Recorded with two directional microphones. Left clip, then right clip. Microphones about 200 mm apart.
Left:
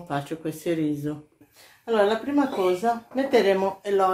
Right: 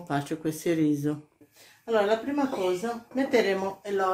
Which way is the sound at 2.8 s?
25° left (ahead or behind).